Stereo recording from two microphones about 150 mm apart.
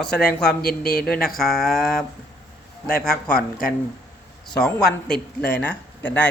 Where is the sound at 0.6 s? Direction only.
90° left.